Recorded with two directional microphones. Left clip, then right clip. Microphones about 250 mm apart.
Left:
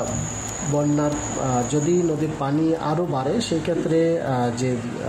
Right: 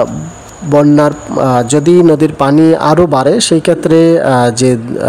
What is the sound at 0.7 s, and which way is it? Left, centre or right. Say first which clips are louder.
Speech: right 15 dB; right.